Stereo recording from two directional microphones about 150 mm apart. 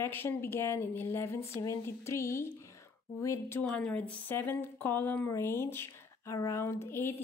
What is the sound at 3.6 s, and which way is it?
A woman's voice, 5° left (ahead or behind).